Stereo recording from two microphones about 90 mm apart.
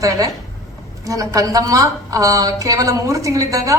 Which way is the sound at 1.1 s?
40° right (ahead or behind).